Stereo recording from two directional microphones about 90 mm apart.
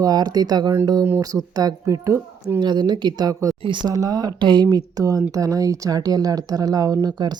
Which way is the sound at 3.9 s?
45° right (ahead or behind).